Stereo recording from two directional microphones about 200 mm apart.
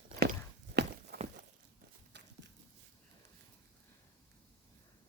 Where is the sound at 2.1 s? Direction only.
60° right (ahead or behind).